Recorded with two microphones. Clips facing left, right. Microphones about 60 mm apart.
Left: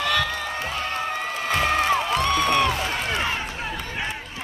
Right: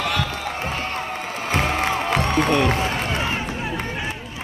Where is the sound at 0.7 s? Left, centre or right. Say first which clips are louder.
Even; right.